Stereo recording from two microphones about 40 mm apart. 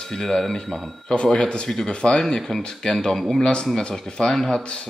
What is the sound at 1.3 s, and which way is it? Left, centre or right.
Speech, left.